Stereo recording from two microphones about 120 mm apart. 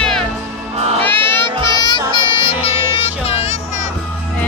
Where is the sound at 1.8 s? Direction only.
40° left (ahead or behind); by 3.4 s 55° left (ahead or behind).